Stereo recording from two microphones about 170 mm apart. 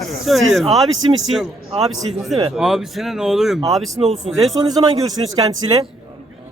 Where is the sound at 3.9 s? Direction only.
45° right (ahead or behind).